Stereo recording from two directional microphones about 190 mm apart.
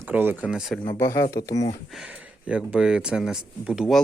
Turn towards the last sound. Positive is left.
turn(degrees=-5)  # may be behind; listen again after turning